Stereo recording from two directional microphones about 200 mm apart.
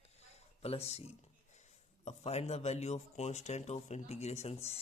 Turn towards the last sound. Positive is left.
turn(degrees=30)  # may be behind; listen again after turning